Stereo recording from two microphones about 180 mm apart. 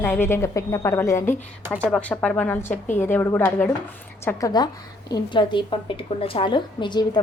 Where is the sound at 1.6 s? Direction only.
10° right (ahead or behind).